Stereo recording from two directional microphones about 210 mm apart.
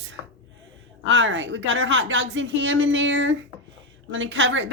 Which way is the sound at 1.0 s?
65° right (ahead or behind).